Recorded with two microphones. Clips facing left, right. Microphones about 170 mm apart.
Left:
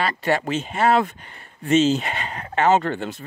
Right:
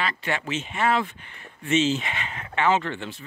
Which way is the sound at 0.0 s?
40° left (ahead or behind).